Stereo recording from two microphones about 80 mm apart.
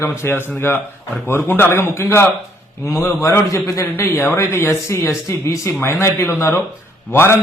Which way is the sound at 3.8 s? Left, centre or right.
Left.